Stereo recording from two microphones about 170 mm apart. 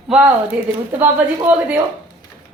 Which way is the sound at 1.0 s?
10° right (ahead or behind).